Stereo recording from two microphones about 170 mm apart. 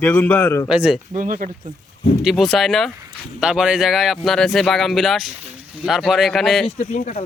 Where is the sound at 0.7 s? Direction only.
5° right (ahead or behind).